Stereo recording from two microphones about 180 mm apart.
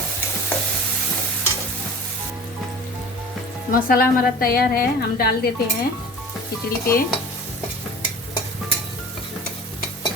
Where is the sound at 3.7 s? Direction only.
50° left (ahead or behind).